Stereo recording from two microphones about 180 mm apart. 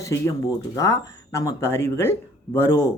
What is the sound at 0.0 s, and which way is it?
Speech, 15° left (ahead or behind).